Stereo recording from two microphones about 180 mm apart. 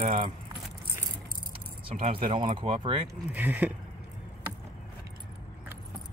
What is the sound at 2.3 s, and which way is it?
Speech, 30° right (ahead or behind).